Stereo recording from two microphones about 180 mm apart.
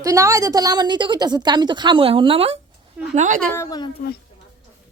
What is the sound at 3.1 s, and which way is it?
Speech, 40° right (ahead or behind).